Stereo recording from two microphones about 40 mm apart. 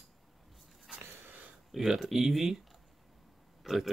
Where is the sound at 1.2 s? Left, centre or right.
Right.